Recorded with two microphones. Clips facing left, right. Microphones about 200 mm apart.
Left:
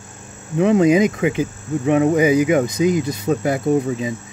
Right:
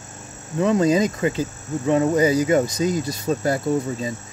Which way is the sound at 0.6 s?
15° left (ahead or behind).